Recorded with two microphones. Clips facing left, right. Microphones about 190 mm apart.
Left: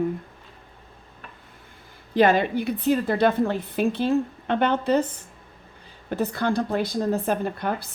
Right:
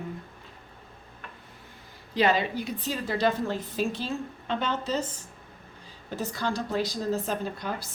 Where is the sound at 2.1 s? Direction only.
50° left (ahead or behind).